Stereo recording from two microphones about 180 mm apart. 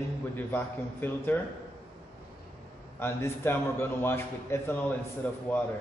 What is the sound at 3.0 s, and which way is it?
A man's voice, 15° left (ahead or behind).